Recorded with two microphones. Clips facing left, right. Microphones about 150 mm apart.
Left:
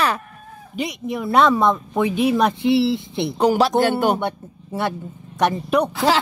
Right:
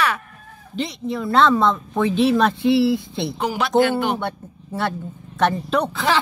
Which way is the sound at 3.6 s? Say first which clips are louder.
Left 1 dB; 35° left (ahead or behind).